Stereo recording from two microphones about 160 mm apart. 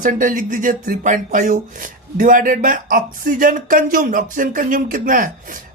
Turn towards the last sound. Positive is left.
turn(degrees=-55)  # may be behind; listen again after turning